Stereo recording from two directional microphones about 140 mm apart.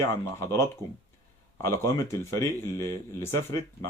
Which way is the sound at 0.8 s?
30° right (ahead or behind).